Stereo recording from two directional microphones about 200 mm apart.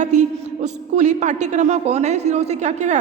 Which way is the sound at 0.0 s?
35° right (ahead or behind).